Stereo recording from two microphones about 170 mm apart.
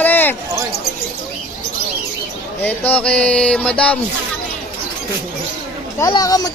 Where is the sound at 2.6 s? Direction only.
10° left (ahead or behind).